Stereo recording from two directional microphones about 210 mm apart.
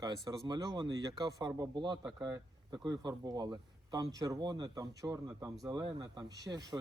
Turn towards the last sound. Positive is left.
turn(degrees=-15)  # may be behind; listen again after turning